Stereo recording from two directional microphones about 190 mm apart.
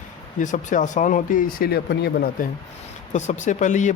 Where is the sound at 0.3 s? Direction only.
40° left (ahead or behind).